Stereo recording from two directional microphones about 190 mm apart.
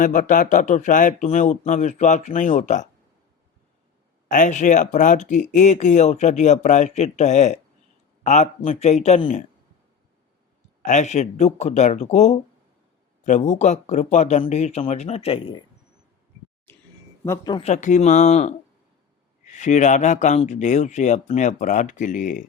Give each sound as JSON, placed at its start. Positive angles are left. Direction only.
{"t": 0.0, "sound": "speech", "side_deg": 45}
{"t": 4.3, "sound": "speech", "side_deg": 40}
{"t": 10.8, "sound": "speech", "side_deg": 40}
{"t": 17.2, "sound": "speech", "side_deg": 20}
{"t": 17.6, "sound": "speech", "side_deg": 40}